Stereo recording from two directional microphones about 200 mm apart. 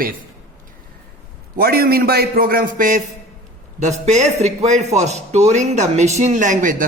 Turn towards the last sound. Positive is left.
turn(degrees=-40)  # may be behind; listen again after turning